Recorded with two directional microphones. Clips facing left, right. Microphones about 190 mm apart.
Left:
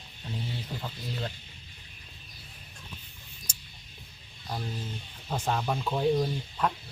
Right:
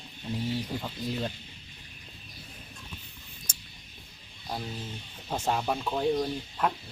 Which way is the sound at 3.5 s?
55° right (ahead or behind).